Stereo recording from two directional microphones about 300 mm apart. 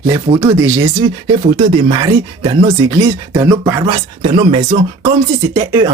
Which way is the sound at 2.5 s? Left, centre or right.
Centre.